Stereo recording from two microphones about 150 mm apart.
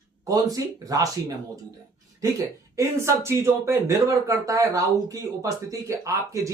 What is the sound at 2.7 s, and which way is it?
Speech, 20° right (ahead or behind).